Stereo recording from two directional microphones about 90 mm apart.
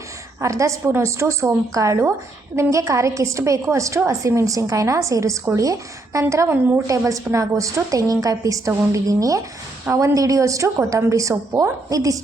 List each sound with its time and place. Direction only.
0.4 s a woman's voice: 35° right (ahead or behind)
7.3 s a woman's voice: 25° right (ahead or behind)
7.9 s a woman's voice: 40° right (ahead or behind)